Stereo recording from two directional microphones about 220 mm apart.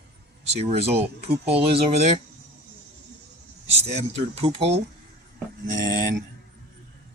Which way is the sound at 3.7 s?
30° right (ahead or behind).